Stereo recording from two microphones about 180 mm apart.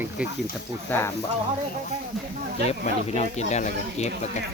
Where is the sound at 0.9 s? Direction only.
10° left (ahead or behind).